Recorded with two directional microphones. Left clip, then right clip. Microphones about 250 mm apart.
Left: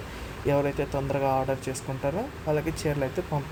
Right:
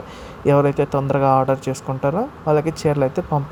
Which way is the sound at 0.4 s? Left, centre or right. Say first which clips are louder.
Right 10 dB; centre.